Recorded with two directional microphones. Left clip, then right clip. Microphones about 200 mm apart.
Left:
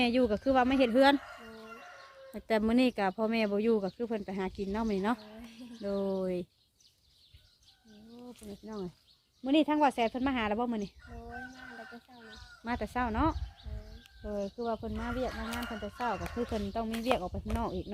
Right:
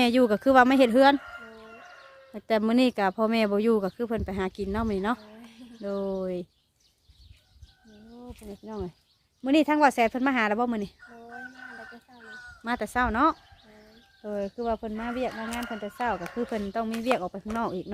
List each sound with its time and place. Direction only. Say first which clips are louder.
0.0 s speech: right 6 dB; 30° right (ahead or behind)
2.3 s speech: right 5 dB; 20° right (ahead or behind)
8.6 s speech: right 5 dB; 25° right (ahead or behind)
12.6 s speech: right 7 dB; 20° right (ahead or behind)
15.4 s speech: right 4 dB; centre (ahead or behind)
16.0 s speech: right 5 dB; 35° right (ahead or behind)